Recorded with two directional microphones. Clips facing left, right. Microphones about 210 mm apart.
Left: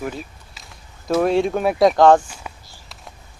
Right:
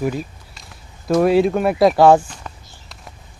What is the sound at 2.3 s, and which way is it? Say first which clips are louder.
Walk: right 1 dB; 5° left (ahead or behind).